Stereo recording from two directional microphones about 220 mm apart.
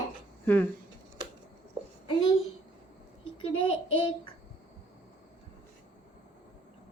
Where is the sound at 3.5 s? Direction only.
25° left (ahead or behind).